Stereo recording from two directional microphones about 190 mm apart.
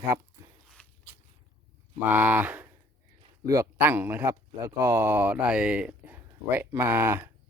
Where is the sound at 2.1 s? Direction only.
5° right (ahead or behind).